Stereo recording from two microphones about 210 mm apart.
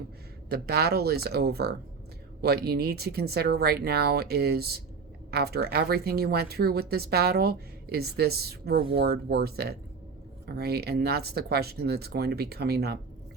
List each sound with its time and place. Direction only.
0.5 s speech: 50° right (ahead or behind)